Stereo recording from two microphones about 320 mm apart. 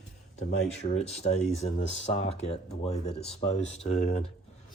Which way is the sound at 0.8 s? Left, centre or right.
Centre.